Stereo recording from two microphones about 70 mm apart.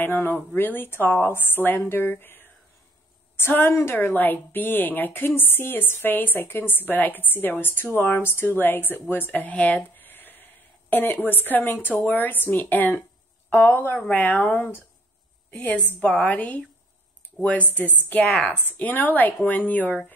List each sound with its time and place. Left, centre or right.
0.0 s speech: left